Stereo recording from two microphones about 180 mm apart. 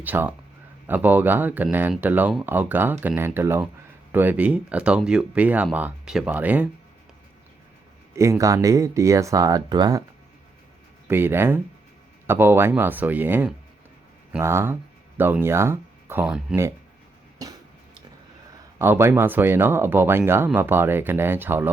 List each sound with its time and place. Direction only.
0.0 s speech: 10° right (ahead or behind)
8.1 s speech: 15° right (ahead or behind)
11.1 s speech: 10° right (ahead or behind)
17.4 s music: 20° right (ahead or behind)
18.8 s speech: 15° right (ahead or behind)